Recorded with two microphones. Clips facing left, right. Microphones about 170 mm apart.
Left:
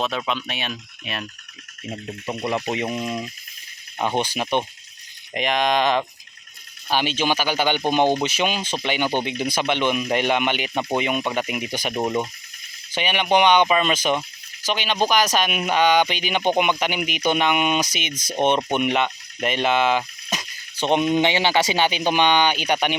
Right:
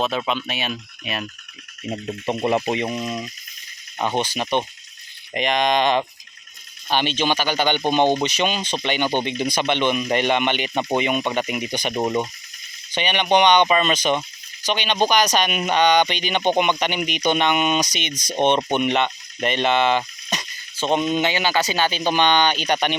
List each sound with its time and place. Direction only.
0.0 s speech: centre (ahead or behind)
1.9 s speech: 30° right (ahead or behind)
2.6 s speech: 5° left (ahead or behind)
20.7 s speech: 15° left (ahead or behind)